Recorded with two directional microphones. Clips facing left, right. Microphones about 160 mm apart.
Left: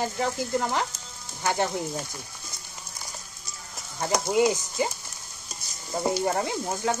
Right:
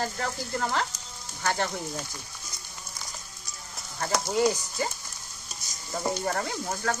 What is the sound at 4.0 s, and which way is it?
Speech, 15° left (ahead or behind).